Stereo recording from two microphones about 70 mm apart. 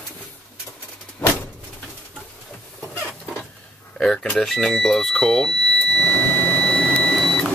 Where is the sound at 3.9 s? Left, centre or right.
Centre.